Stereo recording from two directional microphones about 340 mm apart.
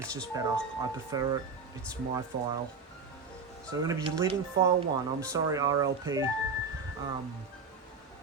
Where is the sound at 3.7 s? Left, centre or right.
Centre.